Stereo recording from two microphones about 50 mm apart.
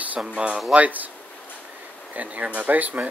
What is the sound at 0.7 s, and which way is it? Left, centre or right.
Speech, right.